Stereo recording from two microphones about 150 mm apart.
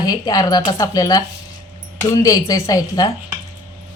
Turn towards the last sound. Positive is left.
turn(degrees=25)  # may be behind; listen again after turning